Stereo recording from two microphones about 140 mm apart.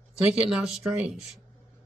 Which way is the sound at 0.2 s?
5° right (ahead or behind).